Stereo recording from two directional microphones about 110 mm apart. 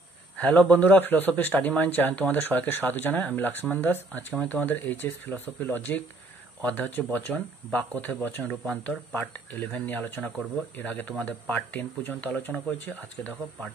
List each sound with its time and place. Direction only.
0.4 s speech: 15° left (ahead or behind)
10.2 s speech: centre (ahead or behind)
10.8 s speech: 15° left (ahead or behind)